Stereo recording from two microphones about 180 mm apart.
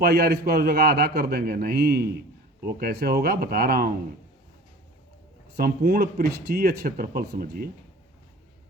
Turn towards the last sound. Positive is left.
turn(degrees=-60)  # may be behind; listen again after turning